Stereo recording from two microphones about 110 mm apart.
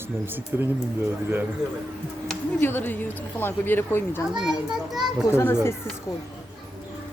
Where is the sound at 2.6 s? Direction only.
20° left (ahead or behind).